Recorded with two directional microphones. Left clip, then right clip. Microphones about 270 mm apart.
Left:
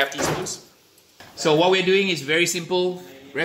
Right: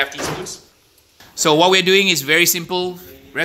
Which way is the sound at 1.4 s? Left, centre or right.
Right.